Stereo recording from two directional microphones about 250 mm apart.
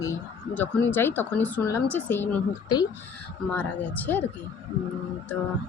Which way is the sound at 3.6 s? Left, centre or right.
Centre.